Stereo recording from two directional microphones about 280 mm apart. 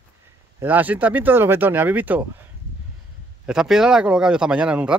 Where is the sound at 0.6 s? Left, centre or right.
Centre.